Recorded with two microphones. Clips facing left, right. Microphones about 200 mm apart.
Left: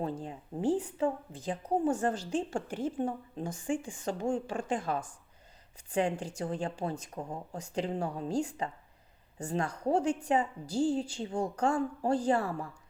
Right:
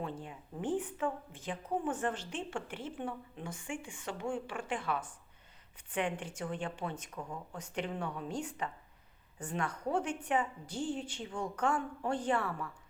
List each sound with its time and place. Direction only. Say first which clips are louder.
0.0 s a woman's voice: left 5 dB; 35° left (ahead or behind)